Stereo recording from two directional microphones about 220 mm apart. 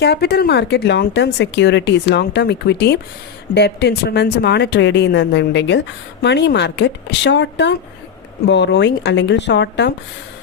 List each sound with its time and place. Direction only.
0.0 s speech: 45° left (ahead or behind)